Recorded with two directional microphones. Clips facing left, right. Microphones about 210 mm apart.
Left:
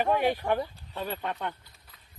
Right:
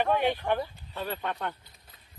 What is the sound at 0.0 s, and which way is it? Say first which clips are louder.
Speech: left 1 dB; 10° left (ahead or behind).